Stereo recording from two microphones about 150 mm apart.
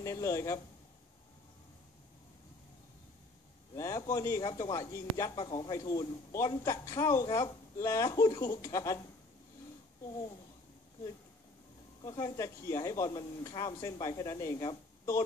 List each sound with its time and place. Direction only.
0.0 s a man's voice: 20° left (ahead or behind)
3.7 s a man's voice: 20° left (ahead or behind)
12.0 s a man's voice: 25° left (ahead or behind)